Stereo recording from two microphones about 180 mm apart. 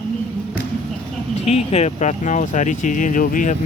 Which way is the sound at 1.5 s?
35° left (ahead or behind).